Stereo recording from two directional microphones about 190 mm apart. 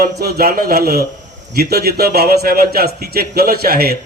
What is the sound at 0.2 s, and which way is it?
A man's voice, 55° right (ahead or behind).